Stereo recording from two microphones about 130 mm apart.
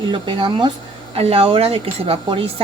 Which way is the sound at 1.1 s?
50° right (ahead or behind).